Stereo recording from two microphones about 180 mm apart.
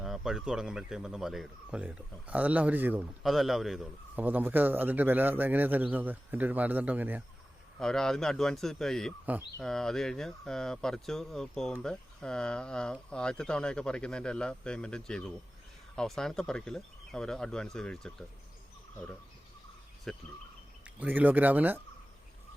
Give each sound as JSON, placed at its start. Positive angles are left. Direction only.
{"t": 0.0, "sound": "speech", "side_deg": 0}
{"t": 7.8, "sound": "speech", "side_deg": 5}
{"t": 20.1, "sound": "speech", "side_deg": 0}
{"t": 20.8, "sound": "speech", "side_deg": -10}